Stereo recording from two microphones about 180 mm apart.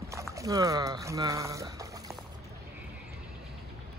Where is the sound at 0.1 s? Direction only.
15° right (ahead or behind).